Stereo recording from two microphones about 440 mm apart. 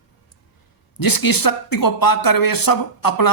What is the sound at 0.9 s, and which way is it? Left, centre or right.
Speech, left.